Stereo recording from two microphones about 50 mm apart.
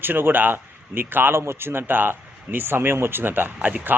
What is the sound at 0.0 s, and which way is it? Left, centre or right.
A man's voice, right.